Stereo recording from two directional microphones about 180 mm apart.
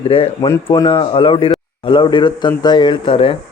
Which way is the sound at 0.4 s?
20° left (ahead or behind).